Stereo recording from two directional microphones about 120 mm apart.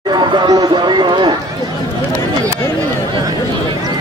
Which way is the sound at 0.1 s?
40° right (ahead or behind).